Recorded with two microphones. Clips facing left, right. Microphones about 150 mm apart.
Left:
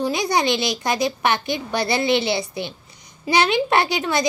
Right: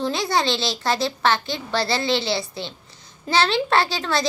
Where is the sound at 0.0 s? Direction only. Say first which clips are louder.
Left 2 dB; 15° left (ahead or behind).